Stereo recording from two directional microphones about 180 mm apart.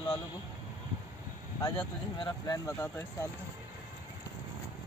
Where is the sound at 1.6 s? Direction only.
25° left (ahead or behind).